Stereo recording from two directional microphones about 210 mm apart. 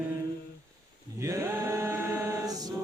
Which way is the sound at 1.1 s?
15° right (ahead or behind).